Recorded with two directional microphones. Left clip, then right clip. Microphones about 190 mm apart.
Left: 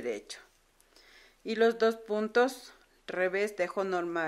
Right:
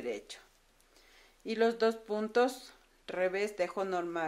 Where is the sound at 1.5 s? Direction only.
20° left (ahead or behind).